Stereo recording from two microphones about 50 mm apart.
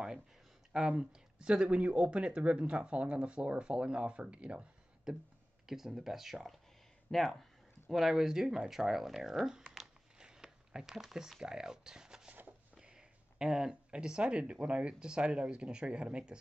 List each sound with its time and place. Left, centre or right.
0.7 s speech: centre
5.1 s speech: centre
7.9 s speech: centre